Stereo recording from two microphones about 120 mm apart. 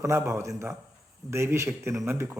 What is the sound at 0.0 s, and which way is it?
Speech, 25° right (ahead or behind).